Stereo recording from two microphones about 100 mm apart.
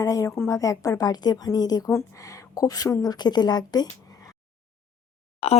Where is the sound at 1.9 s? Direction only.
30° left (ahead or behind).